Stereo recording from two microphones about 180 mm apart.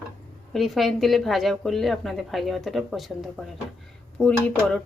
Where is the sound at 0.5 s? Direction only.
Centre (ahead or behind).